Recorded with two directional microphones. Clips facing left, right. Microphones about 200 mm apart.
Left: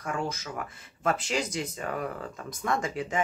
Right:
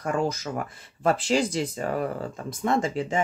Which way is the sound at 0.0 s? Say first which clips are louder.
Right 6 dB; 40° right (ahead or behind).